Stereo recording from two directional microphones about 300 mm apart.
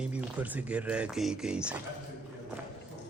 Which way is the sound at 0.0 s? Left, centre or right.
Centre.